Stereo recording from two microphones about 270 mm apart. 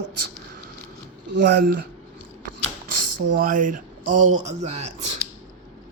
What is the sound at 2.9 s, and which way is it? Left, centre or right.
Speech, right.